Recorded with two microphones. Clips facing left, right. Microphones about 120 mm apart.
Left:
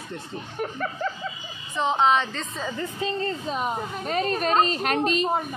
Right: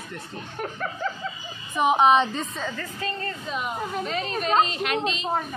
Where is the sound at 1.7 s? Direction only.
15° right (ahead or behind).